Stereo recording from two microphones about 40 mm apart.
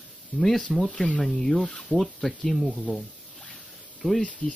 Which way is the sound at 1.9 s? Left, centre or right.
Centre.